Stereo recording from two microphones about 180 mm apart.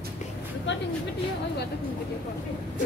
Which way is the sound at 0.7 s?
80° left.